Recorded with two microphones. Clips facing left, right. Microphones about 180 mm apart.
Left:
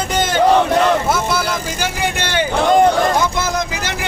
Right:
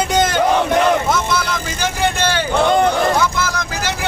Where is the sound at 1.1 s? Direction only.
5° left (ahead or behind).